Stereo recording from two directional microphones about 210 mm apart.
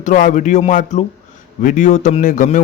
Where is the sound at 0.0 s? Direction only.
35° left (ahead or behind).